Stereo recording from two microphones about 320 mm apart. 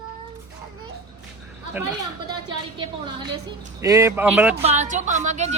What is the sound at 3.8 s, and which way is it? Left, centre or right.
Speech, centre.